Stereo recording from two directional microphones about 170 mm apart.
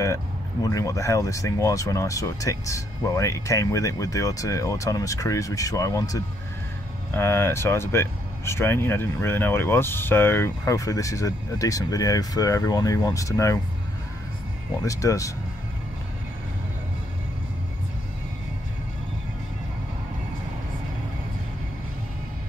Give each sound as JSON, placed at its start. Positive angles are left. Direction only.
{"t": 0.0, "sound": "speech", "side_deg": 20}
{"t": 14.8, "sound": "speech", "side_deg": 20}